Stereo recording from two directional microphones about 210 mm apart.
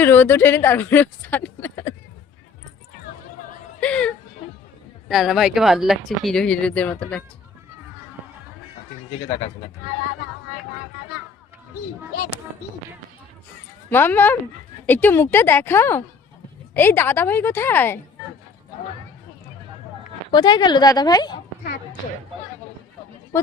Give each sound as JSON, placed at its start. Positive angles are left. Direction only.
{"t": 0.0, "sound": "speech", "side_deg": 10}
{"t": 3.8, "sound": "speech", "side_deg": 5}
{"t": 12.1, "sound": "speech", "side_deg": 50}
{"t": 13.9, "sound": "a woman's voice", "side_deg": 10}
{"t": 20.3, "sound": "a woman's voice", "side_deg": 20}